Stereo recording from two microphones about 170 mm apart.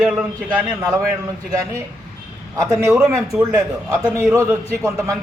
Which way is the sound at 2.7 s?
15° right (ahead or behind).